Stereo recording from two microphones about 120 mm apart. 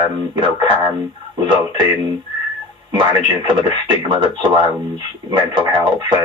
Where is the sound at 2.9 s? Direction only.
40° right (ahead or behind).